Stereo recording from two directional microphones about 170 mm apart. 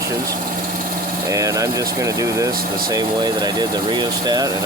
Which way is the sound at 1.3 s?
20° right (ahead or behind).